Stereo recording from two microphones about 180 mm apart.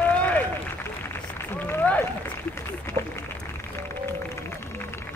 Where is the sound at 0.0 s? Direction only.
10° left (ahead or behind).